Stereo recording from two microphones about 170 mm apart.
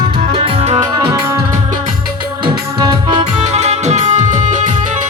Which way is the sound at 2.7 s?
30° right (ahead or behind).